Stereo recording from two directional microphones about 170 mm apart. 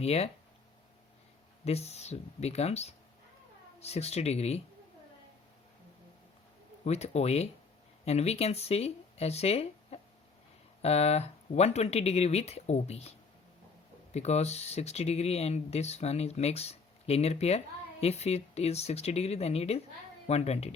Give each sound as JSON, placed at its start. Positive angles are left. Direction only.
{"t": 0.0, "sound": "speech", "side_deg": 40}
{"t": 1.6, "sound": "speech", "side_deg": 40}
{"t": 6.8, "sound": "speech", "side_deg": 40}